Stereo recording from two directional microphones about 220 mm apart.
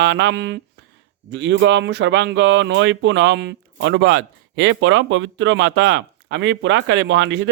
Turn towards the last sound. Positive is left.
turn(degrees=-55)  # may be behind; listen again after turning